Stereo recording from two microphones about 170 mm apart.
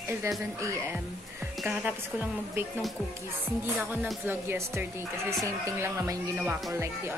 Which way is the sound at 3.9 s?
10° right (ahead or behind).